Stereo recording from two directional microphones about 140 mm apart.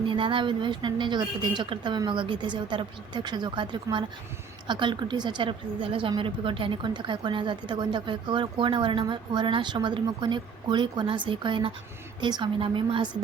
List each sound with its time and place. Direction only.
0.0 s a woman's voice: 35° right (ahead or behind)